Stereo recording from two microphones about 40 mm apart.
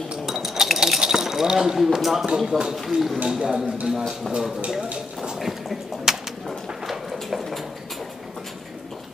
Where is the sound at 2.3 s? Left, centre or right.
Centre.